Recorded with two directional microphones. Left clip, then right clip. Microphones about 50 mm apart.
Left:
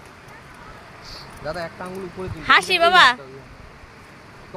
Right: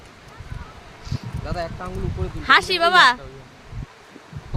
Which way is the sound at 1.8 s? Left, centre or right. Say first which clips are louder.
Even; right.